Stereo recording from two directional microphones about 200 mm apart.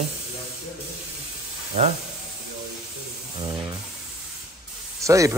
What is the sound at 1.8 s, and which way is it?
Speech, 35° right (ahead or behind).